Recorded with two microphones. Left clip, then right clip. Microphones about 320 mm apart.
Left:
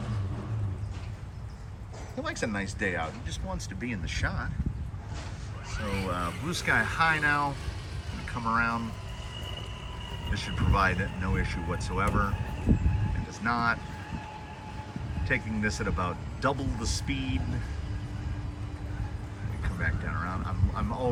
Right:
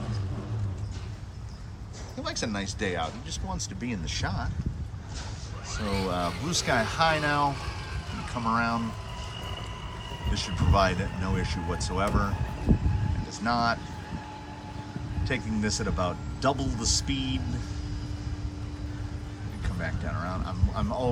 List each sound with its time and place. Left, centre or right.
2.2 s speech: centre
5.7 s speech: right
6.1 s speech: centre
10.2 s speech: centre
15.3 s speech: centre
19.6 s speech: centre